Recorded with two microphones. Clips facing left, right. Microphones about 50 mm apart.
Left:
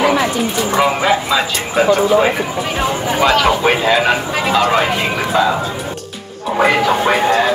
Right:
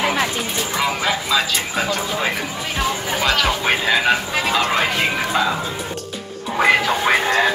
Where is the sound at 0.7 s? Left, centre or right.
Centre.